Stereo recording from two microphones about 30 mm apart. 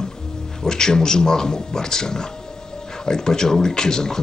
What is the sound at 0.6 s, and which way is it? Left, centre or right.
Speech, left.